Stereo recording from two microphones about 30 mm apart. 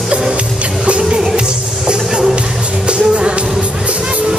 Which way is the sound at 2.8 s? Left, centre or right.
Right.